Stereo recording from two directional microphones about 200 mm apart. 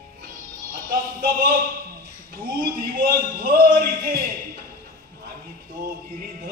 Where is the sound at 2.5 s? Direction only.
45° right (ahead or behind).